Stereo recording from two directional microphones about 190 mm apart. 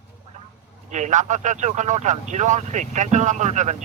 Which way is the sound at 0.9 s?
40° right (ahead or behind).